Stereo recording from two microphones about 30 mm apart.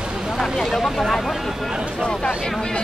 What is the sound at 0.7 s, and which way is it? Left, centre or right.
Speech, centre.